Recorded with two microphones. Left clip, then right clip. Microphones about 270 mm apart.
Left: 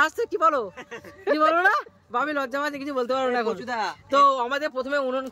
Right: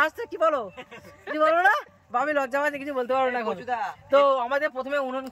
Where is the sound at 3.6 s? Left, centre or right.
Left.